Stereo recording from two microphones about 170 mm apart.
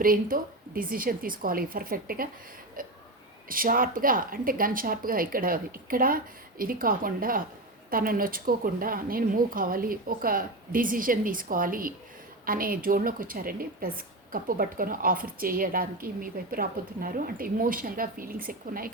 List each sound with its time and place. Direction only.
0.0 s a woman's voice: 55° right (ahead or behind)
2.8 s a sound: 55° right (ahead or behind)
3.5 s a woman's voice: 55° right (ahead or behind)